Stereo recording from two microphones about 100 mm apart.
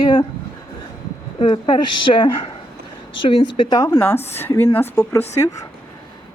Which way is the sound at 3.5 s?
40° left (ahead or behind).